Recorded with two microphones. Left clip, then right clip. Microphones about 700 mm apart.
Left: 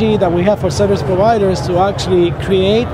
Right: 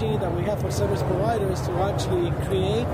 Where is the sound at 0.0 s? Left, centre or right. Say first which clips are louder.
Left 13 dB; left.